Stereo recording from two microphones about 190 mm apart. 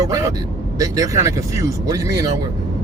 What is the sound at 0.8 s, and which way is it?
Speech, 15° right (ahead or behind).